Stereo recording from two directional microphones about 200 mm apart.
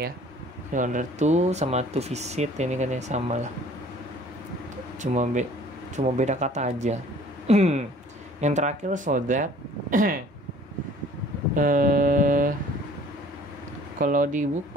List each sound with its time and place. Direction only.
0.7 s speech: 40° right (ahead or behind)
5.0 s speech: 35° right (ahead or behind)
11.5 s a sound: 40° right (ahead or behind)
13.9 s speech: 40° right (ahead or behind)